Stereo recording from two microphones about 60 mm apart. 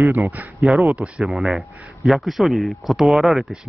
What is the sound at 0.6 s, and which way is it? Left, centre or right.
Speech, centre.